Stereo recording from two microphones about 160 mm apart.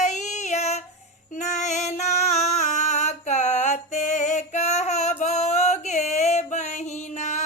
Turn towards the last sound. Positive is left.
turn(degrees=45)  # may be behind; listen again after turning